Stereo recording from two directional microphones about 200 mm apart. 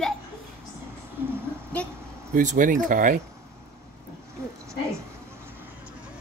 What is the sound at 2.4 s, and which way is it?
Speech, 40° right (ahead or behind).